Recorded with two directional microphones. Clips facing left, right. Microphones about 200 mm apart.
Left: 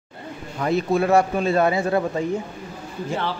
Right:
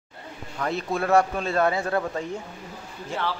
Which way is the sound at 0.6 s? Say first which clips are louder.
Left 6 dB; 10° left (ahead or behind).